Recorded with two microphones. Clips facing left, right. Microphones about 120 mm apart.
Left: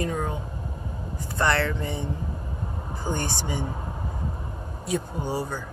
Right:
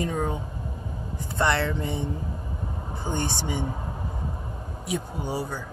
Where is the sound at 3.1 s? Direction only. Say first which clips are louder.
Even; 20° right (ahead or behind).